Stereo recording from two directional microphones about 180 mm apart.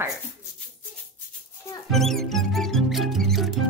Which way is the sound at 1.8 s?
Centre (ahead or behind).